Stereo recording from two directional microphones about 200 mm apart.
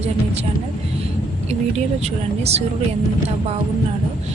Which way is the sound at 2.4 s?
30° right (ahead or behind).